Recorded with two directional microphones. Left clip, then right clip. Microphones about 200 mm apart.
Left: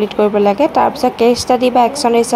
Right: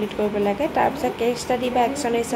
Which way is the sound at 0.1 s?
30° left (ahead or behind).